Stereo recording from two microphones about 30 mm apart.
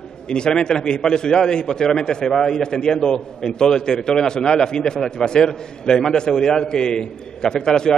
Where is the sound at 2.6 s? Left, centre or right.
Left.